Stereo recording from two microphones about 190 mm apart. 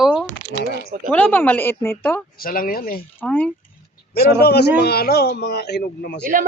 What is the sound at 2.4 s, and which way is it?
Speech, 50° left (ahead or behind).